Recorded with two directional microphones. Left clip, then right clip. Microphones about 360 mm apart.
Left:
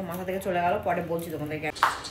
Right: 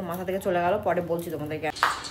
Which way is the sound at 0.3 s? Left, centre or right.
Centre.